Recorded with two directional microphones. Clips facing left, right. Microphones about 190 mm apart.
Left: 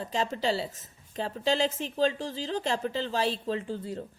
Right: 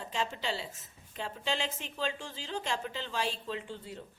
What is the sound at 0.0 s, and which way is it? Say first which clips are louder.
A woman's voice: left 6 dB; 40° left (ahead or behind).